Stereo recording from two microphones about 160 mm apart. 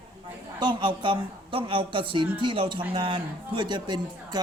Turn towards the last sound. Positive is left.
turn(degrees=-25)  # may be behind; listen again after turning